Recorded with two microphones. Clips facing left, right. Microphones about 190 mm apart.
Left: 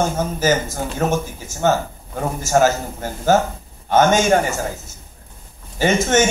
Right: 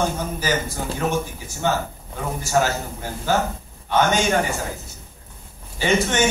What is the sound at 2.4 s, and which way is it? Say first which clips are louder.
Speech: left 5 dB; 45° left (ahead or behind).